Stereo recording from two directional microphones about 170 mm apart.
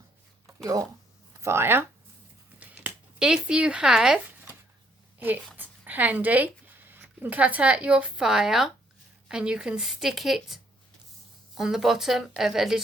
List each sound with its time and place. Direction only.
0.6 s speech: 20° right (ahead or behind)
2.6 s a sound: 10° right (ahead or behind)
5.5 s a woman's voice: 10° right (ahead or behind)